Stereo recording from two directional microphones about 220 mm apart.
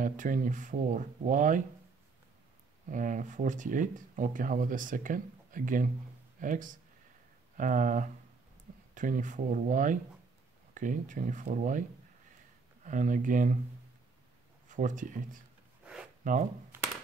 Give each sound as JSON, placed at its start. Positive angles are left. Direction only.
{"t": 0.0, "sound": "speech", "side_deg": -35}
{"t": 2.9, "sound": "speech", "side_deg": -35}
{"t": 12.8, "sound": "speech", "side_deg": -35}
{"t": 14.7, "sound": "speech", "side_deg": -35}
{"t": 15.8, "sound": "a sound", "side_deg": -5}